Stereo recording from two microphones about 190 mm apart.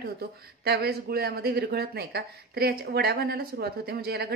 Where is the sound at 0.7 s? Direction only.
55° right (ahead or behind).